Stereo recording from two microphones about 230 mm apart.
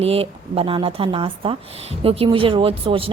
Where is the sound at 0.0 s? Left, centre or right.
Right.